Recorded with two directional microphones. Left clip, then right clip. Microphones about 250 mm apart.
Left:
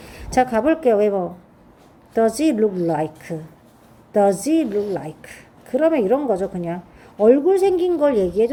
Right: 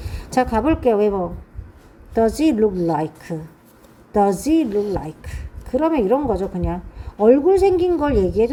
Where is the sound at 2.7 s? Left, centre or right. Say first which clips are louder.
Right 1 dB; right.